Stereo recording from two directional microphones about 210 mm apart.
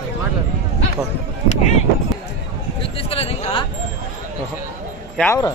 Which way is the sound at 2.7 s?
25° left (ahead or behind).